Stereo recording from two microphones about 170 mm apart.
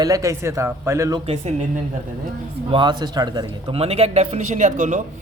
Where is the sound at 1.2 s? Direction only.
40° right (ahead or behind).